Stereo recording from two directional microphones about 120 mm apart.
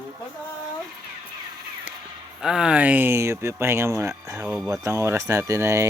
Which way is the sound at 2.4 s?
5° right (ahead or behind).